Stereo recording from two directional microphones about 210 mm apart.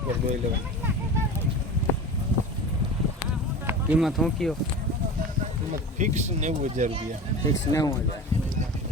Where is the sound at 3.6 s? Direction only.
5° right (ahead or behind).